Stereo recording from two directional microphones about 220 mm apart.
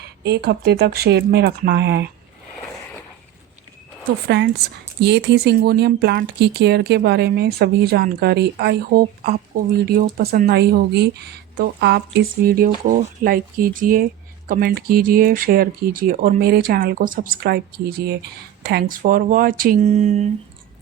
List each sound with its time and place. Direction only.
0.2 s a woman's voice: 50° right (ahead or behind)
4.3 s a woman's voice: 50° right (ahead or behind); by 20.3 s 30° right (ahead or behind)